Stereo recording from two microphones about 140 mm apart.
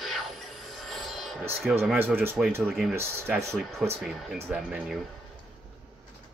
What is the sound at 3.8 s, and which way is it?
Filing, centre (ahead or behind).